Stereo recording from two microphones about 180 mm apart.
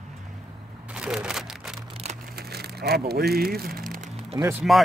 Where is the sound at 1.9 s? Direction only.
35° right (ahead or behind).